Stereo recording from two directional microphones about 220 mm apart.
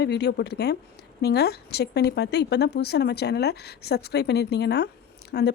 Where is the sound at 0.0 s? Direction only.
50° left (ahead or behind).